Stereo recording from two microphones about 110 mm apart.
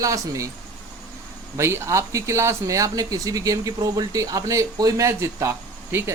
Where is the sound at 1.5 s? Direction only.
25° right (ahead or behind).